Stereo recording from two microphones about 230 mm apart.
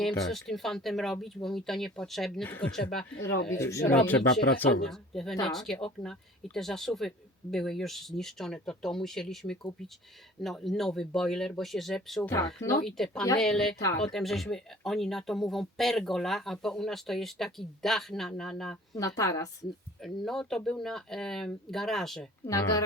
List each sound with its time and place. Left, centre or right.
0.4 s speech: centre
12.3 s speech: centre
12.8 s speech: centre
13.7 s speech: centre
14.0 s speech: centre
18.9 s speech: centre
20.0 s speech: centre
22.4 s speech: centre